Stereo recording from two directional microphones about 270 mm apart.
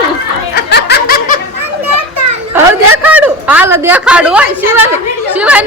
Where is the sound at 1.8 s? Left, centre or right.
Right.